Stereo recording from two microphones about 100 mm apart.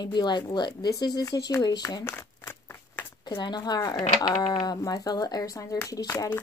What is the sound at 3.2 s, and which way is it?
Speech, 50° left (ahead or behind).